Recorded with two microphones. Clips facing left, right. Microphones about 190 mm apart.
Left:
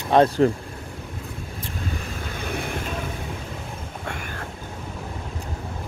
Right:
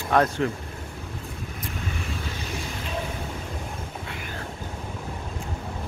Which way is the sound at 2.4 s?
55° left (ahead or behind).